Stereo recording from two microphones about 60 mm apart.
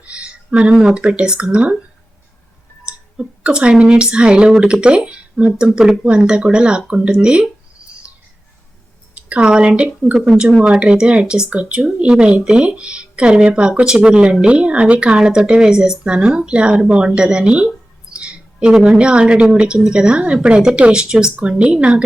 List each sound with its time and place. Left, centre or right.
0.0 s speech: centre
2.8 s speech: centre
9.1 s speech: centre
18.1 s music: centre
18.9 s speech: centre